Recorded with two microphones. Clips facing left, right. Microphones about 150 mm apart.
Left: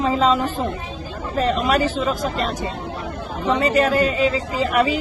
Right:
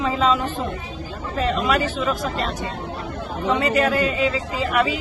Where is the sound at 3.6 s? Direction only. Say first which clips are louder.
Left 3 dB; 35° left (ahead or behind).